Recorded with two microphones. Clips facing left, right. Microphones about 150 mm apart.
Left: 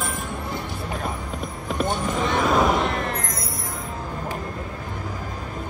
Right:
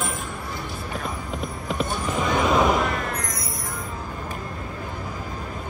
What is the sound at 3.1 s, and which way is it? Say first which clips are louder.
Music: left 1 dB; 25° left (ahead or behind).